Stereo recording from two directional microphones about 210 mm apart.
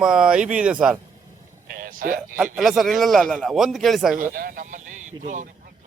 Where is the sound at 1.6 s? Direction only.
40° right (ahead or behind).